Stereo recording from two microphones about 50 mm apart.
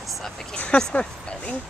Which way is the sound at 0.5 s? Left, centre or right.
Centre.